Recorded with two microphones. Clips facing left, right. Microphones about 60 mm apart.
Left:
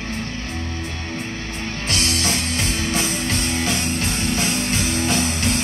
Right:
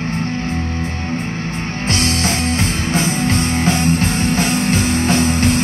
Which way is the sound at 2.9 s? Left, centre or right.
Right.